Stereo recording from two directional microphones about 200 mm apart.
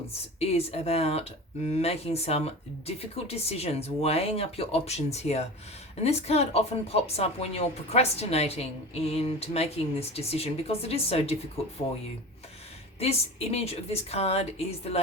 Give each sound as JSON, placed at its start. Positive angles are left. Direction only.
{"t": 0.3, "sound": "speech", "side_deg": 30}
{"t": 13.0, "sound": "speech", "side_deg": 30}